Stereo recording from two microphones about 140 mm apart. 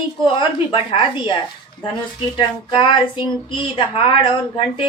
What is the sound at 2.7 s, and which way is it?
A woman's voice, 35° left (ahead or behind).